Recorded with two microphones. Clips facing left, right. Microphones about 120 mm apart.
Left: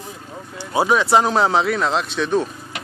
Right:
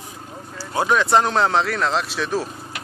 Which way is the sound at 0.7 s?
5° left (ahead or behind).